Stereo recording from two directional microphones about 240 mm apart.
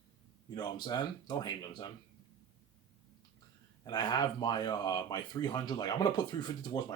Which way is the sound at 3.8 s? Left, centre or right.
Centre.